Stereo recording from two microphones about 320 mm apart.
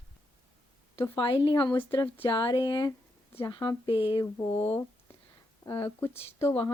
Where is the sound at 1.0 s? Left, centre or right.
Centre.